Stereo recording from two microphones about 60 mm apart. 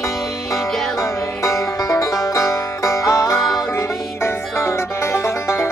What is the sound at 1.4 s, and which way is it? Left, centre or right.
Music, left.